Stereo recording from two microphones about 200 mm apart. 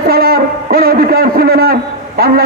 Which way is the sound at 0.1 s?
50° right (ahead or behind).